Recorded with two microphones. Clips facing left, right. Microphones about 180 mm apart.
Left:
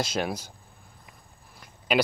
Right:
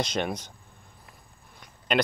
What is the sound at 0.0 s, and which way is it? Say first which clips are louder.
Speech: even; 5° left (ahead or behind).